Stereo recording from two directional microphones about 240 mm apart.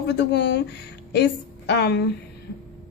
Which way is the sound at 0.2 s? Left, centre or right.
Left.